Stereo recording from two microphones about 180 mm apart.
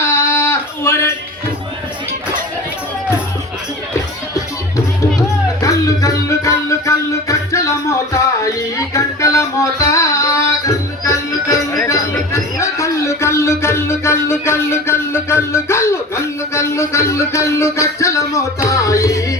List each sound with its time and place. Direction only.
0.1 s a sound: 15° left (ahead or behind)
5.6 s music: 20° left (ahead or behind)
11.9 s speech: 15° left (ahead or behind)
18.7 s music: 15° left (ahead or behind)